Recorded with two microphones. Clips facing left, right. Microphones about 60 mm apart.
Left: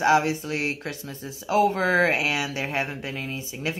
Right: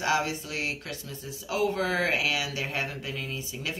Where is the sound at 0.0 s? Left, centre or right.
Left.